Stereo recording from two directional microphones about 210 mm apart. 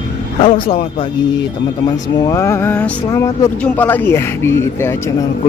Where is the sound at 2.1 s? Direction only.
15° left (ahead or behind).